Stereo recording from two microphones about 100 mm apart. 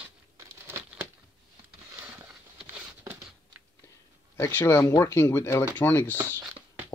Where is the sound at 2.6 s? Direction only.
20° right (ahead or behind).